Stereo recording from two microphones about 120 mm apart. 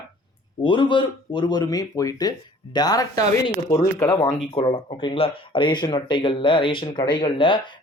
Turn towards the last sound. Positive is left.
turn(degrees=45)  # may be behind; listen again after turning